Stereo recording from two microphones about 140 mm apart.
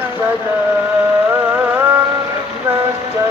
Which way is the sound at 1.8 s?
15° right (ahead or behind).